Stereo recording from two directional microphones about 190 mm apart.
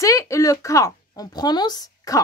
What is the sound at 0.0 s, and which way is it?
Speech, 15° left (ahead or behind).